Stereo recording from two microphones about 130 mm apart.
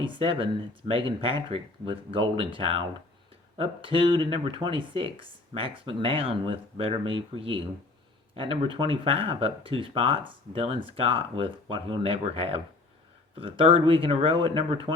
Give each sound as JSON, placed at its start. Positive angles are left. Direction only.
{"t": 0.0, "sound": "speech", "side_deg": -40}